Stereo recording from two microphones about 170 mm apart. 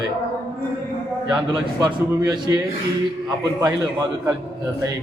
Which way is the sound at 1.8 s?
25° right (ahead or behind).